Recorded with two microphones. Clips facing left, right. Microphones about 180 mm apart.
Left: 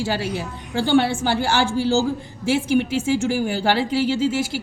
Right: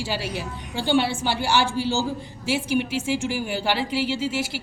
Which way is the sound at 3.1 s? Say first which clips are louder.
Left 5 dB; 45° left (ahead or behind).